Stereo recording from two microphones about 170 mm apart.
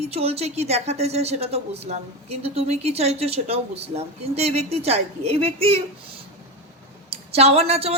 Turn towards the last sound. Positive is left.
turn(degrees=-35)  # may be behind; listen again after turning